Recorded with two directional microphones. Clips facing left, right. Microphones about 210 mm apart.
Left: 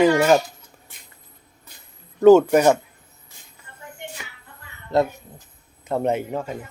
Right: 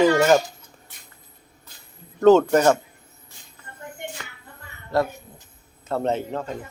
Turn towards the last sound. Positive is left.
turn(degrees=10)  # may be behind; listen again after turning